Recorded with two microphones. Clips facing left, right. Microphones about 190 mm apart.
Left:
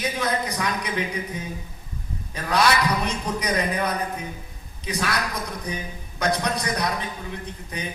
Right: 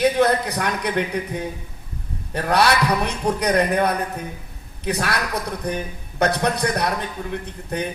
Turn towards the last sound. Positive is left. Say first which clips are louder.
# right 7 dB
turn(degrees=-60)  # may be behind; listen again after turning